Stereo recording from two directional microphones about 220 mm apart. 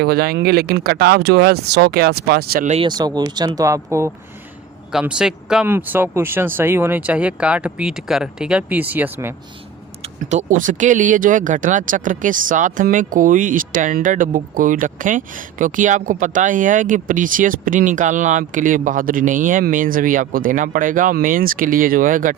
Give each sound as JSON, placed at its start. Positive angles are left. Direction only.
{"t": 0.0, "sound": "speech", "side_deg": -45}
{"t": 3.0, "sound": "speech", "side_deg": -20}
{"t": 10.0, "sound": "speech", "side_deg": -30}